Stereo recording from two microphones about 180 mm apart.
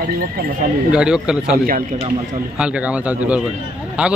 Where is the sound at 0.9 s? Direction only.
5° right (ahead or behind).